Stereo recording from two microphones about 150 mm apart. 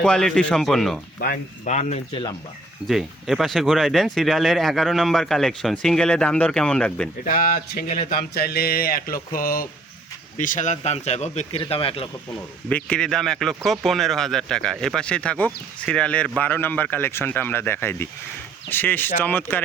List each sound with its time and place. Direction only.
0.0 s speech: 5° left (ahead or behind)
1.6 s a man's voice: 50° left (ahead or behind)
2.8 s speech: centre (ahead or behind)
7.3 s speech: 70° left (ahead or behind)
10.3 s a man's voice: 60° left (ahead or behind); by 12.0 s 40° left (ahead or behind)
12.6 s speech: 5° left (ahead or behind)